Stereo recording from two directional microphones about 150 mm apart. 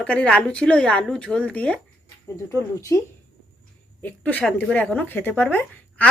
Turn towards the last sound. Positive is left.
turn(degrees=10)  # may be behind; listen again after turning